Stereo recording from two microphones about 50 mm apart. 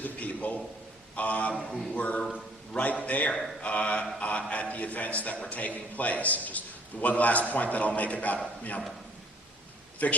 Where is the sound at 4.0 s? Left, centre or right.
Left.